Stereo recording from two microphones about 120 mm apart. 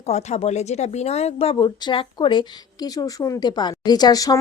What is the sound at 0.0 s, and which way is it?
Speech, 65° left (ahead or behind).